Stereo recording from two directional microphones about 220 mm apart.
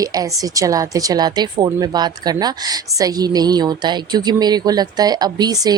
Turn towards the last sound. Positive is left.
turn(degrees=-15)  # may be behind; listen again after turning